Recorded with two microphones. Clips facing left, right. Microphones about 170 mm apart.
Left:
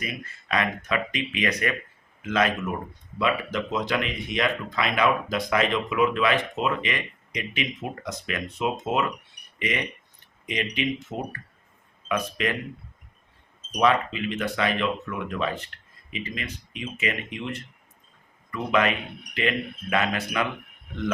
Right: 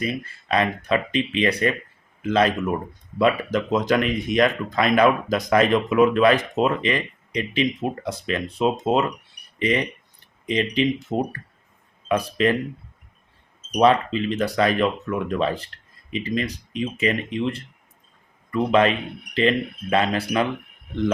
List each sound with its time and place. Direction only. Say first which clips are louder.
0.0 s speech: right 8 dB; 30° right (ahead or behind)
13.7 s speech: right 5 dB; 35° right (ahead or behind)